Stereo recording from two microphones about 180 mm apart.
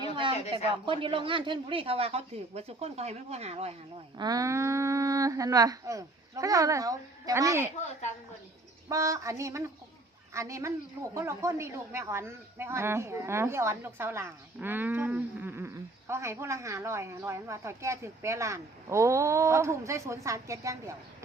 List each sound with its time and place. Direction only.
0.0 s a sound: 30° right (ahead or behind)
0.5 s speech: 30° right (ahead or behind)
4.2 s speech: 20° right (ahead or behind)
8.9 s speech: 15° right (ahead or behind)